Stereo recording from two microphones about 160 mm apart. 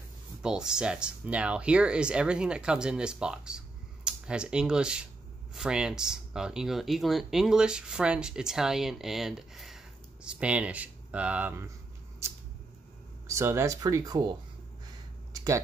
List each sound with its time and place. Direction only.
0.4 s speech: 5° right (ahead or behind)
13.3 s speech: 15° right (ahead or behind)
15.3 s a sound: 20° right (ahead or behind)